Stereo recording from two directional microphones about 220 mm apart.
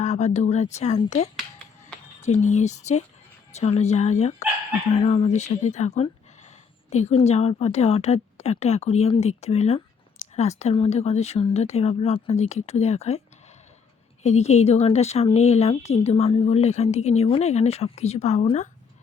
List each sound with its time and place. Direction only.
0.0 s speech: 30° left (ahead or behind)
2.2 s speech: 30° left (ahead or behind)